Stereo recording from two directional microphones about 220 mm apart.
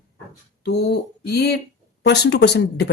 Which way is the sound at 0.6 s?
50° left (ahead or behind).